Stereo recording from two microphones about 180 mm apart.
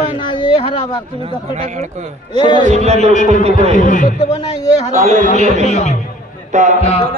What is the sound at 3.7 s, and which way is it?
Speech, 45° left (ahead or behind).